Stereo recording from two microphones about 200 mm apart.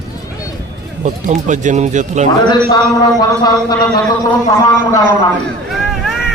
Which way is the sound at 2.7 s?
20° left (ahead or behind).